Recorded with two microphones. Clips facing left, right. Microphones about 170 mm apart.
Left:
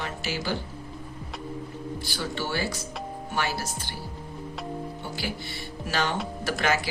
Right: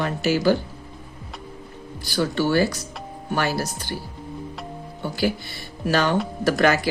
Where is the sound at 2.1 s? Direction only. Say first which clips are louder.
Right 12 dB; 45° right (ahead or behind).